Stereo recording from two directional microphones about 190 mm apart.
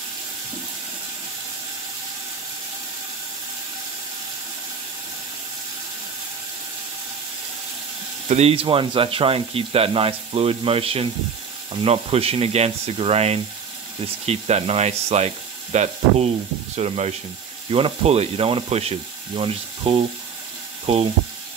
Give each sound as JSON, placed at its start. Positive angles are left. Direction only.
{"t": 8.3, "sound": "speech", "side_deg": -35}
{"t": 20.8, "sound": "sizzle", "side_deg": -30}